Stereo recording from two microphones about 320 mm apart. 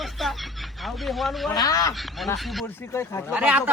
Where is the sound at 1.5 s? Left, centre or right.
Centre.